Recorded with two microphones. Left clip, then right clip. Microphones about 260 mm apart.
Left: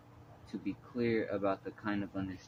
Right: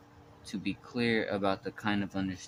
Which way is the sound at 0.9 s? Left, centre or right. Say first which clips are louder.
Right 3 dB; right.